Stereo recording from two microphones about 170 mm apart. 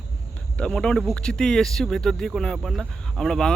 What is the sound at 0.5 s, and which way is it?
Speech, 5° left (ahead or behind).